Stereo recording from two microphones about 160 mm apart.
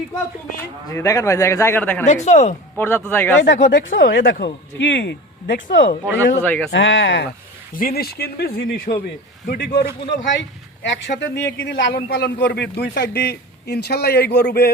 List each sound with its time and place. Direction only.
0.9 s speech: 20° left (ahead or behind)
2.2 s speech: 45° left (ahead or behind)
2.7 s speech: 15° left (ahead or behind)
3.6 s speech: 60° left (ahead or behind)
4.8 s a man's voice: 90° left
5.6 s speech: 65° left (ahead or behind)
6.4 s speech: 10° left (ahead or behind)
6.7 s a man's voice: 90° left
7.7 s speech: 60° left (ahead or behind)
9.5 s a man's voice: 90° left
10.8 s a man's voice: 90° left